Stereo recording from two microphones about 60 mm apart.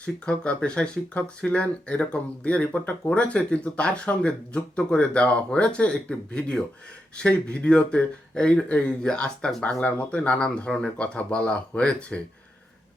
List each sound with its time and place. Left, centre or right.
0.0 s speech: centre